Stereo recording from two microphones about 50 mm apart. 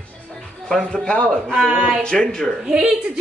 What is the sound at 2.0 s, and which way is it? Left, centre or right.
Speech, centre.